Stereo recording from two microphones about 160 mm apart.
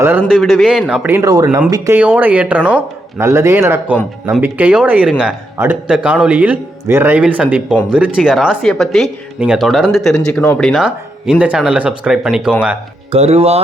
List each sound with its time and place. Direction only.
0.3 s speech: centre (ahead or behind); by 2.0 s 20° right (ahead or behind)
2.0 s speech: 10° right (ahead or behind)
13.1 s speech: 40° right (ahead or behind)